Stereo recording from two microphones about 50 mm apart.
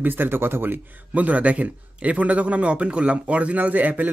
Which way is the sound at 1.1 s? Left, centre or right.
Right.